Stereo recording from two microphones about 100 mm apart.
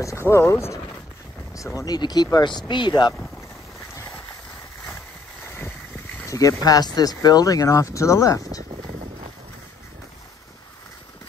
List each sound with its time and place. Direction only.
0.0 s speech: 30° left (ahead or behind)
1.8 s speech: 40° left (ahead or behind)
5.5 s vehicle: 20° left (ahead or behind)
6.2 s speech: 35° left (ahead or behind)